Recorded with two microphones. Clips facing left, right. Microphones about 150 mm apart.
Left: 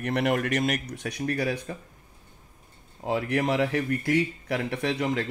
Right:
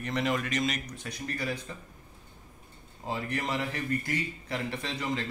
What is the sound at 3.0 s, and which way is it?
A man's voice, 65° left (ahead or behind).